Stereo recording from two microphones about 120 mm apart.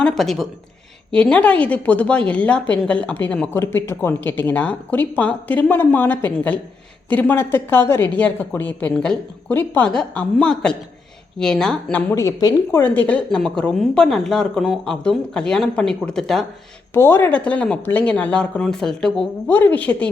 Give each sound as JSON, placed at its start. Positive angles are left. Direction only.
{"t": 0.0, "sound": "a woman's voice", "side_deg": 5}
{"t": 3.6, "sound": "a woman's voice", "side_deg": 20}
{"t": 12.1, "sound": "speech", "side_deg": 30}
{"t": 12.7, "sound": "a woman's voice", "side_deg": 15}
{"t": 16.9, "sound": "a woman's voice", "side_deg": 20}
{"t": 19.5, "sound": "a woman's voice", "side_deg": 15}